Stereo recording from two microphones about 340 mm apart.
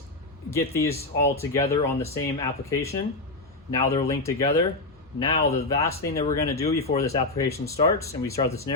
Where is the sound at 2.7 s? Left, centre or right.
Centre.